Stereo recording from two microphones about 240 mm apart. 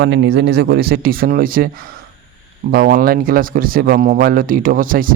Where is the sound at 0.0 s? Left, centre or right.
Right.